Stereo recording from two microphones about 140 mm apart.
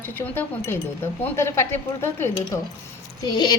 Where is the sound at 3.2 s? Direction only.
30° left (ahead or behind).